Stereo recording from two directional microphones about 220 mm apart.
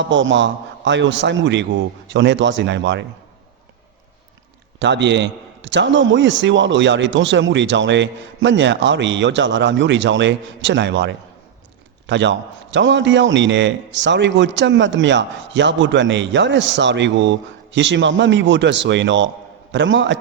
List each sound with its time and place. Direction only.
0.0 s a man's voice: 55° right (ahead or behind)
4.8 s a man's voice: 55° right (ahead or behind)